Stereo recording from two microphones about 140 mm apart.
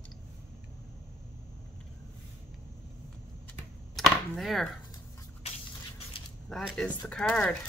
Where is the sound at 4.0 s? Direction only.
Centre (ahead or behind).